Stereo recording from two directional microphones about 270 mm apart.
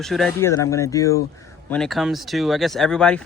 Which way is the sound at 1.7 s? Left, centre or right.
Centre.